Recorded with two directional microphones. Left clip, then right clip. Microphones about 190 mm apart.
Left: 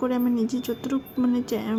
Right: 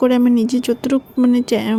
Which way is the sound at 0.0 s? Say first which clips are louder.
Right 10 dB; 35° right (ahead or behind).